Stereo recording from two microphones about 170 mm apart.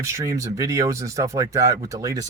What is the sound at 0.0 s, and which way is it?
Speech, 15° right (ahead or behind).